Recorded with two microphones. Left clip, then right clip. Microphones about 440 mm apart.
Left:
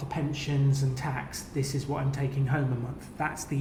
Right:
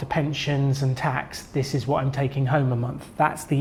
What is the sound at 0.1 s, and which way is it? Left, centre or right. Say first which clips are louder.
Speech: right 8 dB; right.